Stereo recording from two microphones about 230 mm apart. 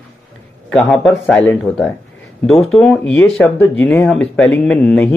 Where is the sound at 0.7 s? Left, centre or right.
Centre.